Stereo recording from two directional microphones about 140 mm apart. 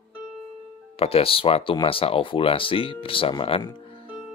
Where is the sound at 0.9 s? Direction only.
45° left (ahead or behind).